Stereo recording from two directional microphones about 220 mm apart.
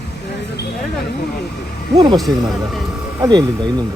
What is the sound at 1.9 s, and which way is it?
Speech, 20° right (ahead or behind).